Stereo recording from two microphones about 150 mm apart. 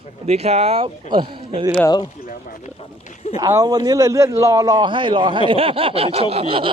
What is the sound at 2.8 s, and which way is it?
Speech, 45° left (ahead or behind).